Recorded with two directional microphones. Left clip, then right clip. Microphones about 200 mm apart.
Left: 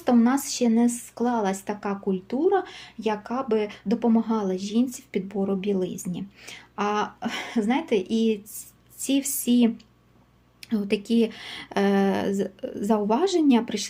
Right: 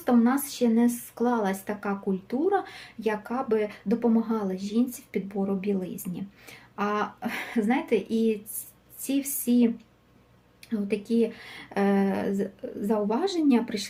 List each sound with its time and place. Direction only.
0.0 s speech: 25° left (ahead or behind)